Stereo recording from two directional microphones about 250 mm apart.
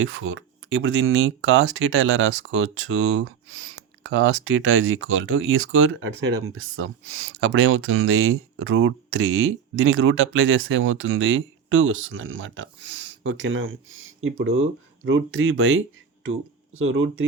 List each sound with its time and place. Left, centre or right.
0.0 s speech: right